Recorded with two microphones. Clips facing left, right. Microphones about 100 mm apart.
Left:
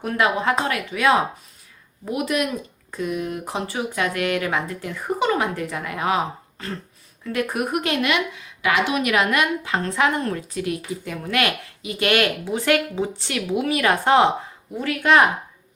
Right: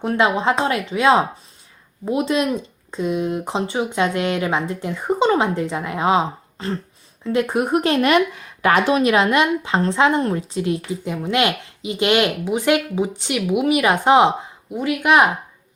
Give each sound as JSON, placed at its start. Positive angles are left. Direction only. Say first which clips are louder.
{"t": 0.0, "sound": "speech", "louder": "right 3 dB", "side_deg": -25}